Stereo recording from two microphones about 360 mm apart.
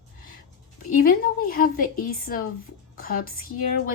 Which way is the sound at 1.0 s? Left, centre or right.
Left.